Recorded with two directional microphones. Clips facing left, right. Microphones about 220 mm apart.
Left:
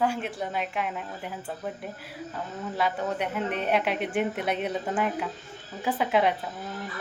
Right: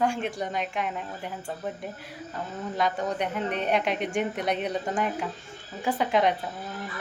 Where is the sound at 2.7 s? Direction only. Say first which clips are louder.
Right 1 dB; 5° left (ahead or behind).